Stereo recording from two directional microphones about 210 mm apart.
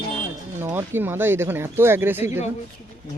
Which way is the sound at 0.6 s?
10° right (ahead or behind).